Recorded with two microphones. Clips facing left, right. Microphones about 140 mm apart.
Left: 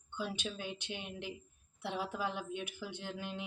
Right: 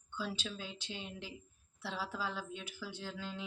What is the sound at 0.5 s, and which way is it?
A woman's voice, 20° left (ahead or behind).